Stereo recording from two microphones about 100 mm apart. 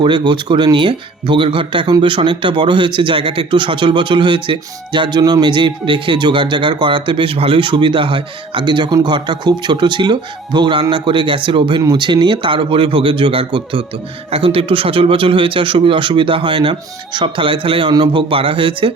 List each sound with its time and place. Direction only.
0.0 s speech: 50° right (ahead or behind)
14.3 s speech: 75° right (ahead or behind); by 18.9 s 60° right (ahead or behind)